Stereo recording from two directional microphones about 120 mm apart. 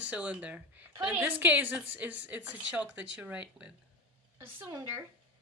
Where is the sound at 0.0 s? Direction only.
10° right (ahead or behind).